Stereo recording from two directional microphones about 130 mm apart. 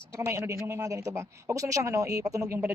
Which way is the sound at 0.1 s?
25° right (ahead or behind).